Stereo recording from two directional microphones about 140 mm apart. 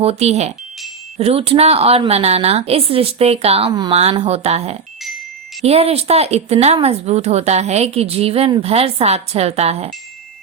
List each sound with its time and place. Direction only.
0.0 s a woman's voice: 50° right (ahead or behind)
3.7 s a woman's voice: 30° right (ahead or behind)
4.1 s a woman's voice: 40° right (ahead or behind)